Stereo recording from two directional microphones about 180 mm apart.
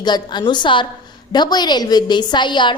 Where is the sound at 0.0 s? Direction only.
25° left (ahead or behind).